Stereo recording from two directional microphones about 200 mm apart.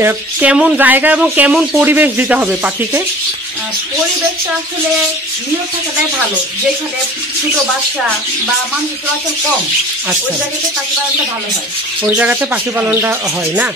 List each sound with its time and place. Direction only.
0.0 s speech: 5° right (ahead or behind)
12.0 s speech: 10° right (ahead or behind)